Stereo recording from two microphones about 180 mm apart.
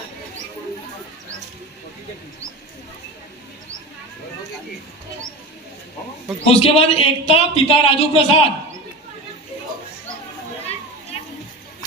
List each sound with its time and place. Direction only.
6.4 s speech: 35° left (ahead or behind)
11.1 s children playing: 35° left (ahead or behind)